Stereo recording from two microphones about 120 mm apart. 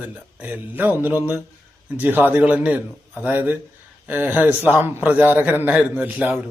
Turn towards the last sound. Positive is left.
turn(degrees=-15)  # may be behind; listen again after turning